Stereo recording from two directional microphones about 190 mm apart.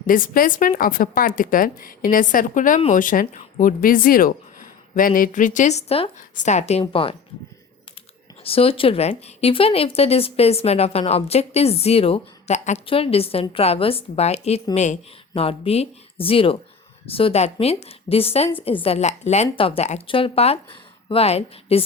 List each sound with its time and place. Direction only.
0.1 s a woman's voice: 45° left (ahead or behind); by 7.2 s 30° left (ahead or behind)
8.4 s speech: 30° left (ahead or behind)